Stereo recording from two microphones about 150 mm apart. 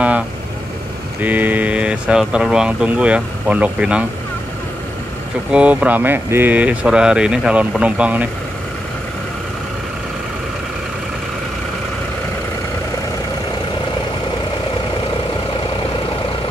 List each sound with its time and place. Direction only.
1.2 s speech: 10° right (ahead or behind)
5.5 s speech: 10° right (ahead or behind)